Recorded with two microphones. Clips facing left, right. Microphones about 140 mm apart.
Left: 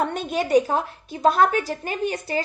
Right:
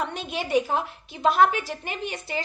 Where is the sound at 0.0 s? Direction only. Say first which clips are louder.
Left 6 dB; 45° left (ahead or behind).